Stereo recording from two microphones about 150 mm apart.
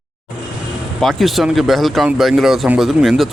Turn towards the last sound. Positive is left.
turn(degrees=0)  # may be behind; listen again after turning